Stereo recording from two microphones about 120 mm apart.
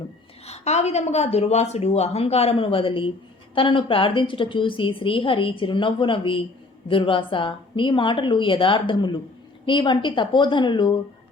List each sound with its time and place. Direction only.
0.4 s a woman's voice: 65° left (ahead or behind); by 10.9 s 40° left (ahead or behind)